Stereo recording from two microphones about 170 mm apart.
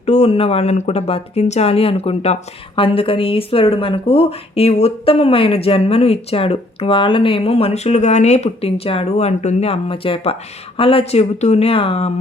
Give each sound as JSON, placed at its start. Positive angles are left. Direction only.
{"t": 0.0, "sound": "speech", "side_deg": 40}